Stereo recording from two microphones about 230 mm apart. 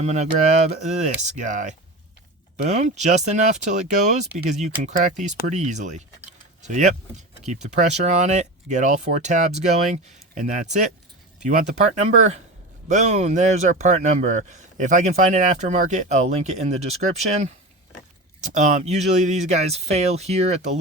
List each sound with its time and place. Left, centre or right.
0.0 s speech: right
18.3 s speech: right